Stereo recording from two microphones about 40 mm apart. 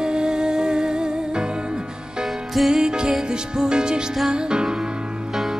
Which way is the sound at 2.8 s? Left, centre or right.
Centre.